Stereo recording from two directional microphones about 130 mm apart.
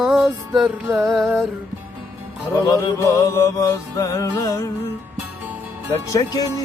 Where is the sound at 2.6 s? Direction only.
25° left (ahead or behind).